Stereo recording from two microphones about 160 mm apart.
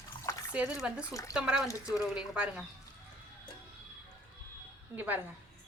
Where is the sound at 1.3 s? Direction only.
5° right (ahead or behind).